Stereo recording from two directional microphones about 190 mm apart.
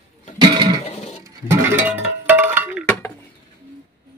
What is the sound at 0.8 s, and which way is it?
Guitar, 35° left (ahead or behind).